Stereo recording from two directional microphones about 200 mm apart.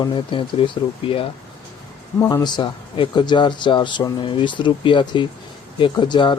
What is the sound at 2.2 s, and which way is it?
Speech, 15° left (ahead or behind).